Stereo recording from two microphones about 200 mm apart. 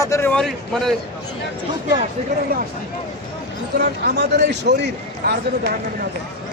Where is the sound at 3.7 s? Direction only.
55° right (ahead or behind).